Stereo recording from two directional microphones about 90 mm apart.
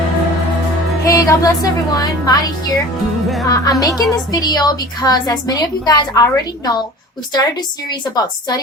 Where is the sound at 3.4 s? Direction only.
40° left (ahead or behind).